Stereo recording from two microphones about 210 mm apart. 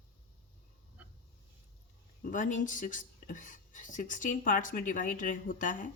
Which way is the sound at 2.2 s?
40° left (ahead or behind).